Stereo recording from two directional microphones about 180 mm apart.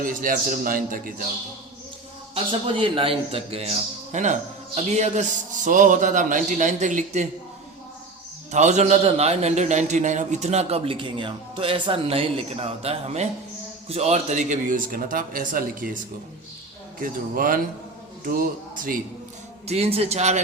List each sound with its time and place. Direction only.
0.0 s speech: 50° right (ahead or behind)
2.3 s a man's voice: 30° right (ahead or behind)
8.5 s a man's voice: 40° right (ahead or behind)
17.0 s speech: 50° right (ahead or behind)
19.6 s a man's voice: 35° right (ahead or behind)